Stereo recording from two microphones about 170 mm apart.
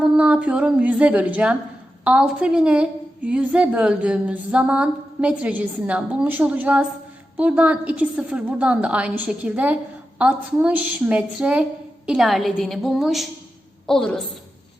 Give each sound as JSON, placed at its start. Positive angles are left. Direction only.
{"t": 0.0, "sound": "a woman's voice", "side_deg": -5}